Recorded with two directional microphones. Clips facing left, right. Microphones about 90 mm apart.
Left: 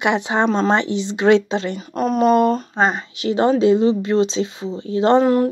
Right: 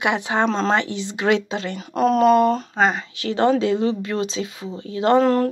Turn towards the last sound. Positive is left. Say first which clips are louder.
# left 2 dB
turn(degrees=10)  # may be behind; listen again after turning